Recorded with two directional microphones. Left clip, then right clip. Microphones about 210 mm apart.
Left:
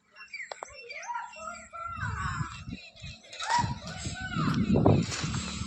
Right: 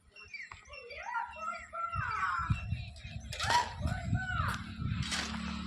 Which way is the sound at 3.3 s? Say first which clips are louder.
Left 2 dB; 45° right (ahead or behind).